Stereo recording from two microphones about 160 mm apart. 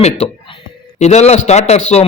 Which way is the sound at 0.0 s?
35° left (ahead or behind).